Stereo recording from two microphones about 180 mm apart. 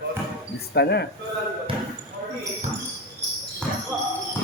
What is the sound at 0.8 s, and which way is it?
Speech, 65° left (ahead or behind).